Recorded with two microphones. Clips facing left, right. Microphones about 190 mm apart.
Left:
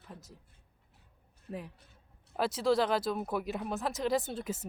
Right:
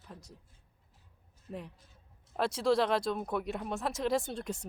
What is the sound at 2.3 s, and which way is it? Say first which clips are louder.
Speech: even; centre (ahead or behind).